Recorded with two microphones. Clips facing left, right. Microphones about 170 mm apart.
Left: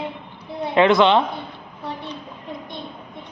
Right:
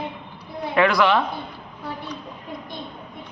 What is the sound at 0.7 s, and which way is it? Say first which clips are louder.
Speech: left 4 dB; 25° left (ahead or behind).